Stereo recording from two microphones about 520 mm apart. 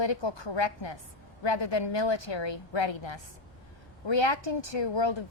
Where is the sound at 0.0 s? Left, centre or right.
Left.